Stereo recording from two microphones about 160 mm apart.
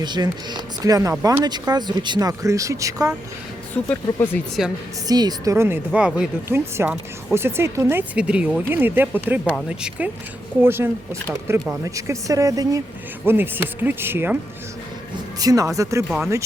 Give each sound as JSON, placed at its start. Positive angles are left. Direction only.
{"t": 0.0, "sound": "speech", "side_deg": -25}
{"t": 3.8, "sound": "speech", "side_deg": 15}
{"t": 5.0, "sound": "speech", "side_deg": -25}
{"t": 15.4, "sound": "speech", "side_deg": -20}
{"t": 16.0, "sound": "speech", "side_deg": 0}